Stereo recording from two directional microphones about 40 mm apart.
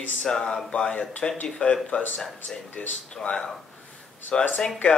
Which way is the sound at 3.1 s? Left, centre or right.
Left.